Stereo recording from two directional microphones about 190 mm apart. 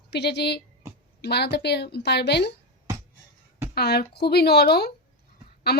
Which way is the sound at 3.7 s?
60° left (ahead or behind).